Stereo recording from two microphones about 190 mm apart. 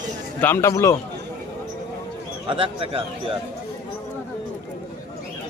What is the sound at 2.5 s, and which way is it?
Speech, 30° right (ahead or behind).